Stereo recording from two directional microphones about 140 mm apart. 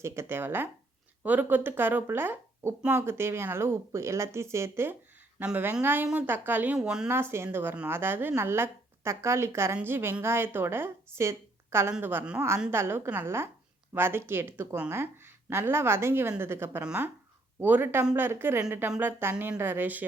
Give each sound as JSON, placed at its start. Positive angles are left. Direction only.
{"t": 0.0, "sound": "a woman's voice", "side_deg": -20}
{"t": 7.1, "sound": "a woman's voice", "side_deg": -15}